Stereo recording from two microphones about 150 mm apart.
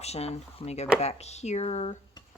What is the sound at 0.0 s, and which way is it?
Speech, 45° left (ahead or behind).